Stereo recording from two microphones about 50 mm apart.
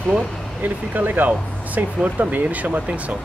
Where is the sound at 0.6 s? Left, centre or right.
Right.